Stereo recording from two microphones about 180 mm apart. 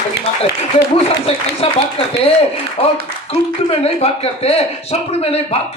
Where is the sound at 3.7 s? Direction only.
35° left (ahead or behind).